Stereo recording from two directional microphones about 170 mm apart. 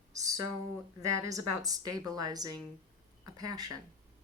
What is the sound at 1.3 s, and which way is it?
Speech, 20° right (ahead or behind).